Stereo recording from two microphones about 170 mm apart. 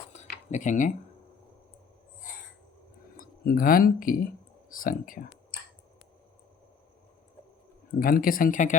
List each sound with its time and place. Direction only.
0.5 s speech: 45° left (ahead or behind)
3.2 s speech: 55° left (ahead or behind)
7.9 s speech: 55° left (ahead or behind)